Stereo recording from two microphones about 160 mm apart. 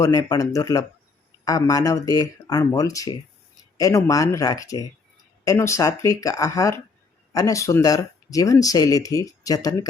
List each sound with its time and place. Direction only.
0.0 s speech: 20° left (ahead or behind)